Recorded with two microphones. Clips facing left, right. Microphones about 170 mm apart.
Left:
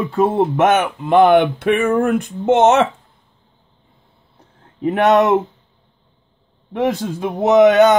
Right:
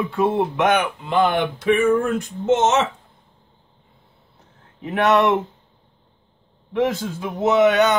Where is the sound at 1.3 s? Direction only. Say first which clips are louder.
Left 6 dB; 60° left (ahead or behind).